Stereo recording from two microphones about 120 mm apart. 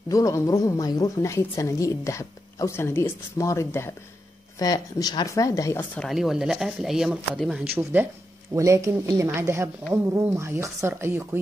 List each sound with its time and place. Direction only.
0.1 s a woman's voice: 30° left (ahead or behind)
5.9 s speech: centre (ahead or behind)
7.7 s speech: 15° right (ahead or behind)